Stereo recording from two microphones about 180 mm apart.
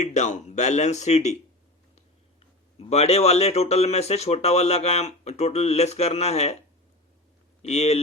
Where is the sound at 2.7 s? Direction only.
35° left (ahead or behind).